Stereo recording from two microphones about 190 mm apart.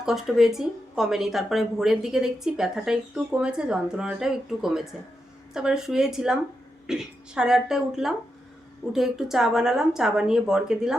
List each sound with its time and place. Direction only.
0.0 s speech: centre (ahead or behind)